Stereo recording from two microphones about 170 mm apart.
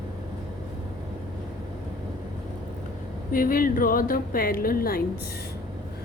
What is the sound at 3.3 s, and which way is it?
A woman's voice, 55° left (ahead or behind).